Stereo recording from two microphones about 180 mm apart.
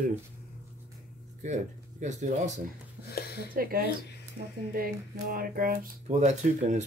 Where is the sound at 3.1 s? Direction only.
65° left (ahead or behind).